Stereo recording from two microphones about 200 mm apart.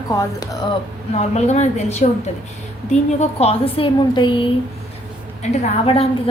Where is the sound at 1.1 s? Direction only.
35° left (ahead or behind).